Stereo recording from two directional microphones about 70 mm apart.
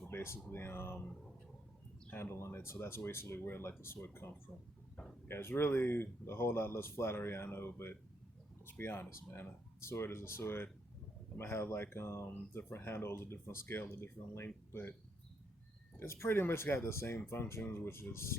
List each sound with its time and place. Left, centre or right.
0.1 s speech: left
2.0 s speech: left
5.3 s speech: left
8.8 s speech: left
16.0 s speech: left